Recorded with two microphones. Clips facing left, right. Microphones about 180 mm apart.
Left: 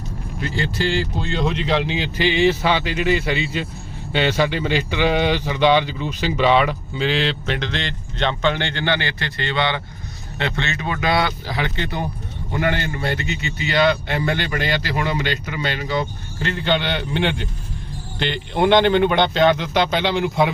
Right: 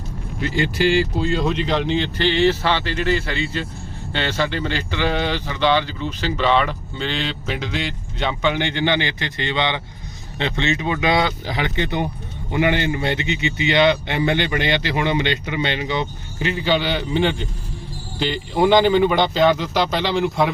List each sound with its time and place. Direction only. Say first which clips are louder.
0.5 s speech: right 4 dB; 15° right (ahead or behind); by 20.5 s centre (ahead or behind)